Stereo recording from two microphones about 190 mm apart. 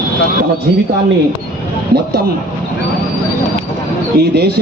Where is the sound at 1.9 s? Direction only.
55° right (ahead or behind).